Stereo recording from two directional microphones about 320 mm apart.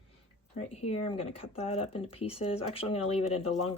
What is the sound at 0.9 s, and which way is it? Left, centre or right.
Speech, centre.